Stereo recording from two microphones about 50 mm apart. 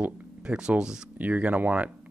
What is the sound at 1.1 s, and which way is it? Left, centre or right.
Speech, right.